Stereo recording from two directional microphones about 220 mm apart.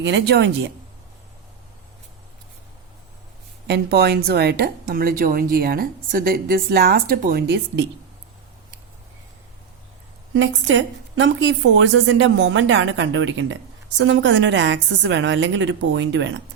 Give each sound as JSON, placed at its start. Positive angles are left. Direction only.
{"t": 0.0, "sound": "a woman's voice", "side_deg": -50}
{"t": 3.7, "sound": "a woman's voice", "side_deg": -45}
{"t": 10.3, "sound": "a woman's voice", "side_deg": -60}